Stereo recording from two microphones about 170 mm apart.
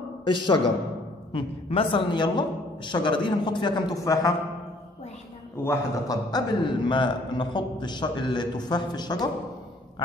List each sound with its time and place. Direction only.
0.2 s a man's voice: 30° left (ahead or behind)
5.6 s a man's voice: 20° left (ahead or behind)